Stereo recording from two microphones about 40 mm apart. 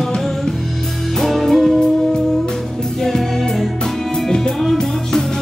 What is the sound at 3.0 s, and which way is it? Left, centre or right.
Music, centre.